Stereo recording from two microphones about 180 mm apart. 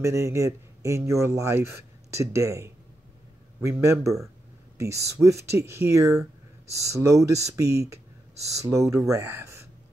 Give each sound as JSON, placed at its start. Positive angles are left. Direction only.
{"t": 0.0, "sound": "speech", "side_deg": -15}